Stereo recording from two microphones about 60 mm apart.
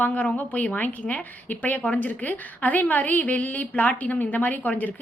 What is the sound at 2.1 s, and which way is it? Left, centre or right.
A woman's voice, left.